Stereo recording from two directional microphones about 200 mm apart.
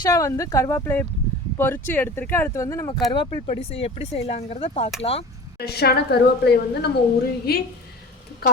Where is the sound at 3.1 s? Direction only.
30° left (ahead or behind).